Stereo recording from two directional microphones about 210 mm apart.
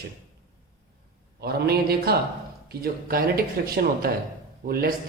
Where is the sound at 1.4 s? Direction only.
50° right (ahead or behind).